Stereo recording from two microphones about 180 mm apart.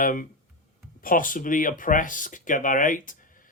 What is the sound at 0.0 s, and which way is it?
Speech, 50° left (ahead or behind).